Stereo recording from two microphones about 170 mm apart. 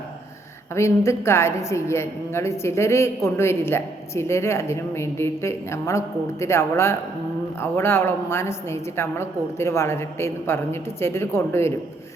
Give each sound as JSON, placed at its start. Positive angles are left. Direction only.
{"t": 0.7, "sound": "a woman's voice", "side_deg": 15}